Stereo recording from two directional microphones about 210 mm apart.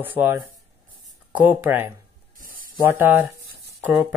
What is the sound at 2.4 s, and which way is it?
Spray, 40° right (ahead or behind).